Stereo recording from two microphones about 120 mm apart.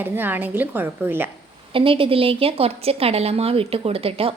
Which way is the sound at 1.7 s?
50° right (ahead or behind).